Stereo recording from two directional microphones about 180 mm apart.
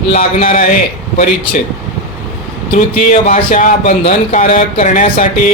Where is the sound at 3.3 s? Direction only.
45° left (ahead or behind).